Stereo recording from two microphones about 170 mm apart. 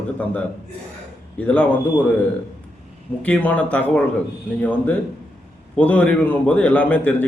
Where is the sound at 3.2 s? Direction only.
10° left (ahead or behind).